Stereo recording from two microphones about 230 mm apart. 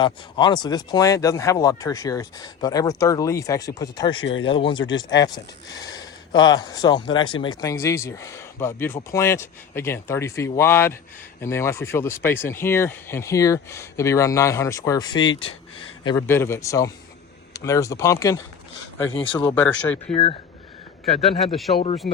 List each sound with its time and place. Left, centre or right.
0.0 s speech: centre
4.2 s speech: left
4.4 s speech: left
19.5 s speech: centre
21.4 s speech: centre